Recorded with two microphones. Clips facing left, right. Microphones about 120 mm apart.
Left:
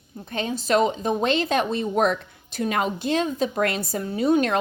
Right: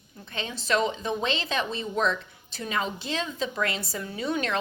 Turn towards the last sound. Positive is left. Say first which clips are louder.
# left 8 dB
turn(degrees=45)  # may be behind; listen again after turning